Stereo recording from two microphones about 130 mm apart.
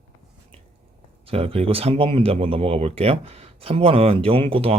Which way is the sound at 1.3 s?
50° right (ahead or behind).